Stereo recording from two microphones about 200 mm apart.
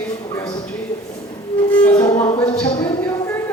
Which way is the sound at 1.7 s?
5° left (ahead or behind).